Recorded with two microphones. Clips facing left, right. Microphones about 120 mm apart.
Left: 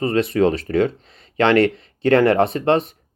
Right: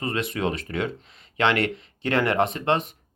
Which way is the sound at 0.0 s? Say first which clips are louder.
Left 9 dB; 35° left (ahead or behind).